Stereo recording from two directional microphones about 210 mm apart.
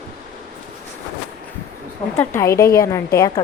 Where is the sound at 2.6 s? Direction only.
45° left (ahead or behind).